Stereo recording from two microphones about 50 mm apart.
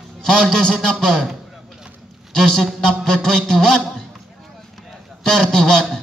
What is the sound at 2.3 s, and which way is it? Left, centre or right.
Speech, centre.